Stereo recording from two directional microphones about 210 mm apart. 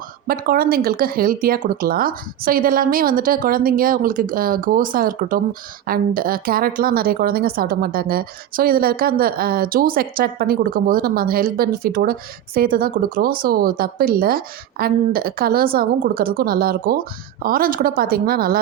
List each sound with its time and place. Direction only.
0.3 s a woman's voice: 45° right (ahead or behind)